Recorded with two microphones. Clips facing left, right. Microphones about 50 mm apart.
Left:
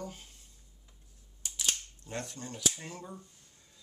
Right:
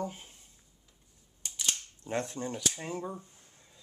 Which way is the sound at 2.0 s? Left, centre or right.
Right.